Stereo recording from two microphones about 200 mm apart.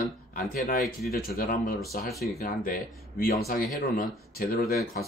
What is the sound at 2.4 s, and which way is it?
Speech, 45° left (ahead or behind).